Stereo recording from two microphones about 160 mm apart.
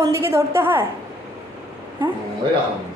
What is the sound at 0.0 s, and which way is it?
Speech, 15° right (ahead or behind).